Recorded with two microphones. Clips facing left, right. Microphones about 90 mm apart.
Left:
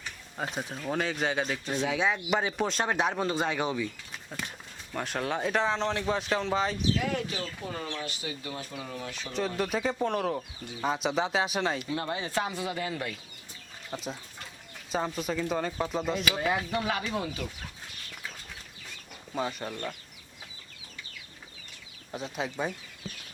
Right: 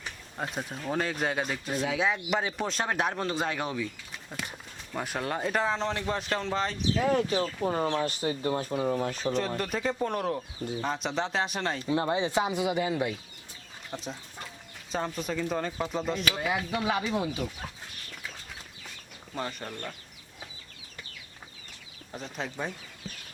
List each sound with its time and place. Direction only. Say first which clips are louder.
0.3 s speech: even; centre (ahead or behind)
6.9 s speech: right 5 dB; 35° right (ahead or behind)
9.6 s speech: left 1 dB; centre (ahead or behind)
11.8 s speech: right 5 dB; 25° right (ahead or behind)
13.9 s speech: left 1 dB; centre (ahead or behind)
16.7 s speech: right 2 dB; 15° right (ahead or behind)
19.3 s speech: left 3 dB; 5° left (ahead or behind)
22.1 s speech: left 2 dB; 5° left (ahead or behind)